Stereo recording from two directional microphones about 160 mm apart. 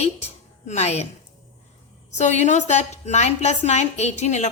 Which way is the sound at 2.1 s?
50° left (ahead or behind).